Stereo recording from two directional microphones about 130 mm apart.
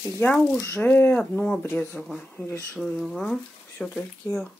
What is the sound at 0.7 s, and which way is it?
Speech, 15° left (ahead or behind).